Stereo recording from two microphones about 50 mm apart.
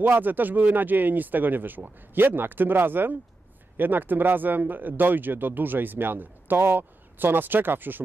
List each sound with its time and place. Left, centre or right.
0.0 s speech: right